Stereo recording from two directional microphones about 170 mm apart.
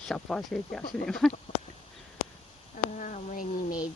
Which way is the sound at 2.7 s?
50° left (ahead or behind).